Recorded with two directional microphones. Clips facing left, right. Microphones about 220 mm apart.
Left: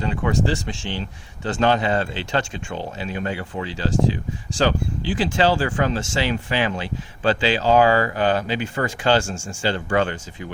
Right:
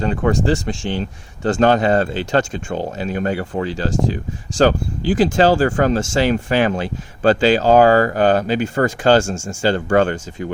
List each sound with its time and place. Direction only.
0.0 s speech: 45° right (ahead or behind)